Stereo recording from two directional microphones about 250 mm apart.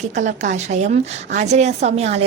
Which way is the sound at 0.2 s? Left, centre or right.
Right.